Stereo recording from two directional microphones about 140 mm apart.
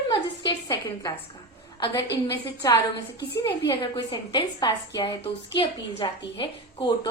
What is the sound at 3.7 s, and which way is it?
A woman's voice, 35° left (ahead or behind).